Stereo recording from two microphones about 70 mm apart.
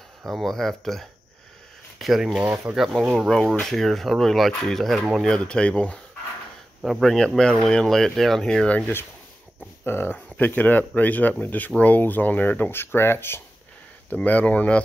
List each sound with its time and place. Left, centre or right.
0.2 s speech: centre
2.3 s speech: centre
6.8 s speech: centre
8.6 s speech: left
9.8 s speech: left
14.1 s speech: left